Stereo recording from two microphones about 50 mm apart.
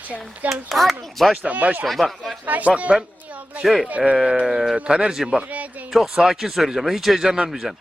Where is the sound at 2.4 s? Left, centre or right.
Right.